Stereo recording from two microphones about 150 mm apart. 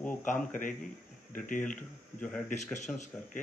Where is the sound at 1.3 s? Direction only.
65° left (ahead or behind).